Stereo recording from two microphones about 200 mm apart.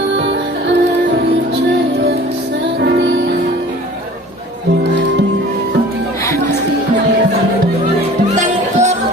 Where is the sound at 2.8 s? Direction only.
60° right (ahead or behind).